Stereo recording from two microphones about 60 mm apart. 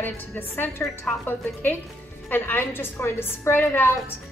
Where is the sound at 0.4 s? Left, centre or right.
Left.